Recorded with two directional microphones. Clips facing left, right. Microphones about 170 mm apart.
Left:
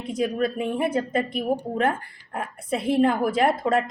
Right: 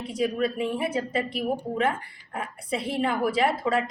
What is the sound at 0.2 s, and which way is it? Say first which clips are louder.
A woman's voice: left 1 dB; 45° left (ahead or behind).